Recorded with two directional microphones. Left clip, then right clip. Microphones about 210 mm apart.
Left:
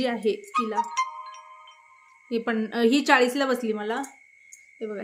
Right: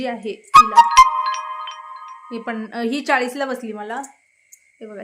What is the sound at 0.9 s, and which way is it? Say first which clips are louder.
Glockenspiel: right 17 dB; 45° right (ahead or behind).